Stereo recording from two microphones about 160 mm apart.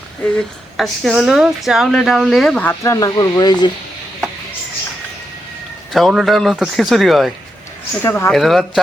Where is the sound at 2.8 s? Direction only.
20° left (ahead or behind).